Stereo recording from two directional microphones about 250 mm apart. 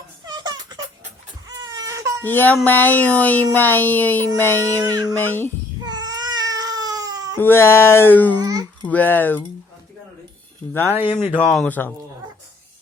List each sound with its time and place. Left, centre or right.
0.3 s music: centre
1.5 s crying: centre
2.2 s speech: centre
5.8 s cat: centre
7.3 s speech: centre
8.4 s a child's voice: centre
8.8 s speech: centre
11.0 s speech: left
11.3 s speech: centre